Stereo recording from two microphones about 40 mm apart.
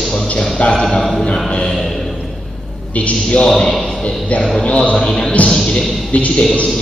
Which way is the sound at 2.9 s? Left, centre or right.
Left.